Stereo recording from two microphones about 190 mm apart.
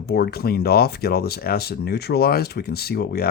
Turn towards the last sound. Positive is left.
turn(degrees=55)  # may be behind; listen again after turning